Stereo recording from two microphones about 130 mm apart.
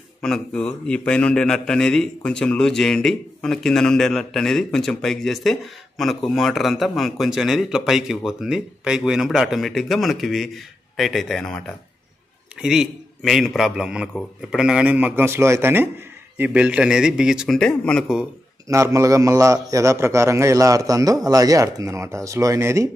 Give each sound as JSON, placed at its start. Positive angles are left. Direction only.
{"t": 0.2, "sound": "a man's voice", "side_deg": 5}
{"t": 17.6, "sound": "speech", "side_deg": 5}
{"t": 18.7, "sound": "a man's voice", "side_deg": -25}